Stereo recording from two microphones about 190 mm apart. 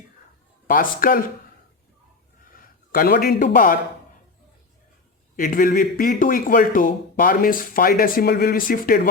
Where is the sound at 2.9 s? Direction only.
50° left (ahead or behind).